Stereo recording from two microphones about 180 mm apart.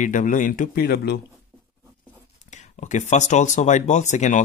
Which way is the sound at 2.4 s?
40° left (ahead or behind).